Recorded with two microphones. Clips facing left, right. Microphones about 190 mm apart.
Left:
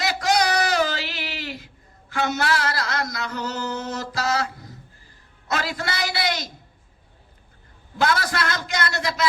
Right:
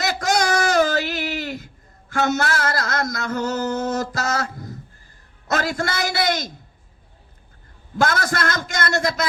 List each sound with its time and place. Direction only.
0.0 s a sound: 45° right (ahead or behind)
5.5 s a man's voice: 45° right (ahead or behind)
7.9 s a man's voice: 45° right (ahead or behind)